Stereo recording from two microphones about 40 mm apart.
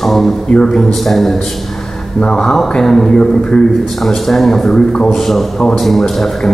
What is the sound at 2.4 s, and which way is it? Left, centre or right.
A man's voice, centre.